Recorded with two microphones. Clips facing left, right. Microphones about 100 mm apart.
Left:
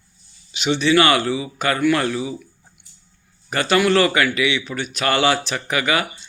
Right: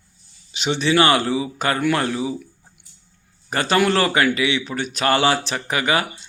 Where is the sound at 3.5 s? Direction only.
35° right (ahead or behind).